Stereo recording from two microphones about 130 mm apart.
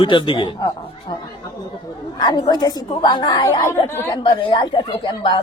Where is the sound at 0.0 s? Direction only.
40° left (ahead or behind).